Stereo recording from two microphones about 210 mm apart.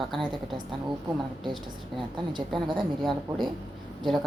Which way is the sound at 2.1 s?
20° right (ahead or behind).